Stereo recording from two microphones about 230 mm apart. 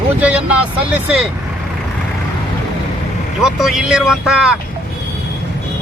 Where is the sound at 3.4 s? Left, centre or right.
Centre.